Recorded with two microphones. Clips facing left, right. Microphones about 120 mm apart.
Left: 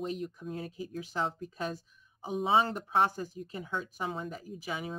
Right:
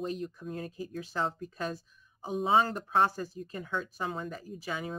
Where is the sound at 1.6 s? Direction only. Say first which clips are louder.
Right 1 dB; 15° left (ahead or behind).